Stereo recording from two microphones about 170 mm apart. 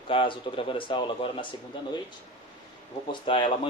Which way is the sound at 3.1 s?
30° left (ahead or behind).